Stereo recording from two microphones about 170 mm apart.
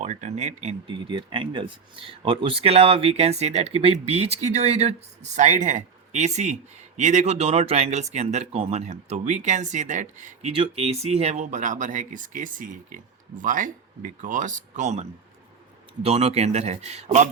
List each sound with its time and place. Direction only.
0.0 s speech: 45° right (ahead or behind)
1.0 s speech: 30° right (ahead or behind); by 10.5 s 45° right (ahead or behind)
10.5 s speech: 35° right (ahead or behind)
16.0 s speech: 40° right (ahead or behind)